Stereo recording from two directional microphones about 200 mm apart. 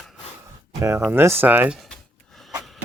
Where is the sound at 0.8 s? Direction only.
15° right (ahead or behind).